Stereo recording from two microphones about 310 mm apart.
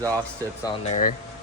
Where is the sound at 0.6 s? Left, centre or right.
Left.